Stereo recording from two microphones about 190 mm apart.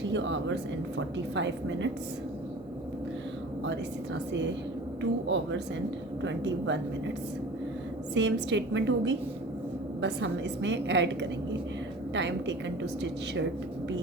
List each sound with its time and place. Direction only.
0.0 s a woman's voice: 70° right (ahead or behind)
3.6 s a woman's voice: 70° right (ahead or behind)
8.1 s a woman's voice: 70° right (ahead or behind)